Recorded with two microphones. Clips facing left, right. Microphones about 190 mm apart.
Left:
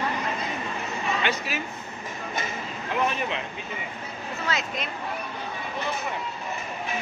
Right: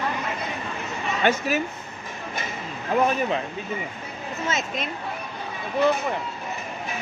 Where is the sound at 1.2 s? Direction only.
45° right (ahead or behind).